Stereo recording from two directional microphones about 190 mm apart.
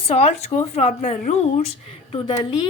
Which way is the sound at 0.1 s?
35° left (ahead or behind).